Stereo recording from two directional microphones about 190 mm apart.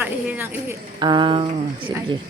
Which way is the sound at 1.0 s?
25° right (ahead or behind).